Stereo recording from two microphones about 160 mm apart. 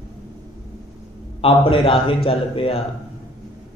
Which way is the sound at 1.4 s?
35° left (ahead or behind).